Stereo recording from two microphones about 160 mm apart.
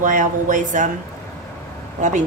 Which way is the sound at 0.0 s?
55° right (ahead or behind).